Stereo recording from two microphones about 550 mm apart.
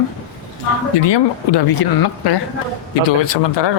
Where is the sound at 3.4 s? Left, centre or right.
Left.